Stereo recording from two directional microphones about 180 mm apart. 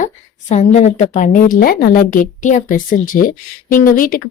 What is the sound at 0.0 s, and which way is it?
A woman's voice, 45° left (ahead or behind).